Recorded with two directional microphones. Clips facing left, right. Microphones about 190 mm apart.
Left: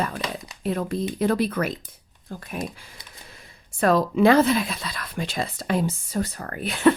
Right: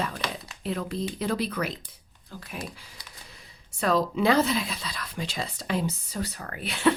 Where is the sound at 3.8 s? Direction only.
50° left (ahead or behind).